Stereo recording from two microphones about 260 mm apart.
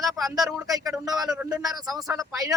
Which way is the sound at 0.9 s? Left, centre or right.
Centre.